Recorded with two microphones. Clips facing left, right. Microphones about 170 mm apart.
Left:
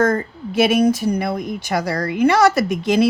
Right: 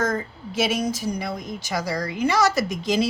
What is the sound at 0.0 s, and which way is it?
Speech, 60° left (ahead or behind).